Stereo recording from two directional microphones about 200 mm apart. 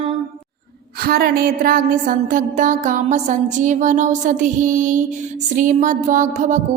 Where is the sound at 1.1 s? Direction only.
50° right (ahead or behind).